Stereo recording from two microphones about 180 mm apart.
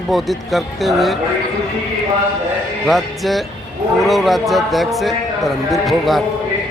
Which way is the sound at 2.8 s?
Centre (ahead or behind).